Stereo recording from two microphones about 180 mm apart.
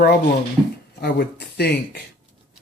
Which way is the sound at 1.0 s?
65° left (ahead or behind).